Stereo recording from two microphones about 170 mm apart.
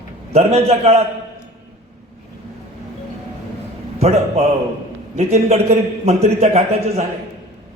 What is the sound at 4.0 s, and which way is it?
Speech, 40° right (ahead or behind).